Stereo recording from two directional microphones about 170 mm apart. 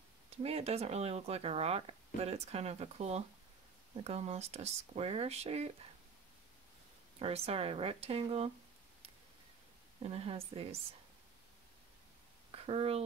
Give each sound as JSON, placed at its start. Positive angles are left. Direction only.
{"t": 0.4, "sound": "speech", "side_deg": -35}
{"t": 7.2, "sound": "speech", "side_deg": -35}
{"t": 10.0, "sound": "speech", "side_deg": -35}
{"t": 12.4, "sound": "a sound", "side_deg": -35}